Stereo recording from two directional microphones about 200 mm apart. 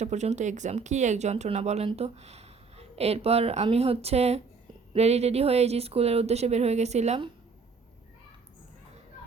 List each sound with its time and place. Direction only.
0.0 s speech: 35° right (ahead or behind)